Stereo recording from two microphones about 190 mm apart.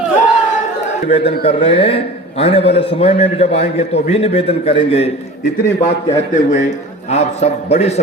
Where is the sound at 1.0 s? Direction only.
30° left (ahead or behind).